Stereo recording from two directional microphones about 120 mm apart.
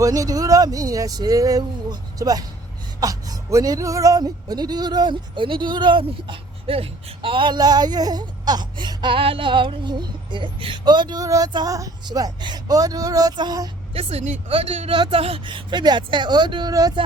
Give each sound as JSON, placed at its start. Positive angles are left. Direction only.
{"t": 0.0, "sound": "speech", "side_deg": -30}
{"t": 13.9, "sound": "speech", "side_deg": -55}